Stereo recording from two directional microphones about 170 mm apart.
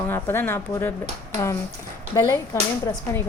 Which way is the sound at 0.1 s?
10° left (ahead or behind).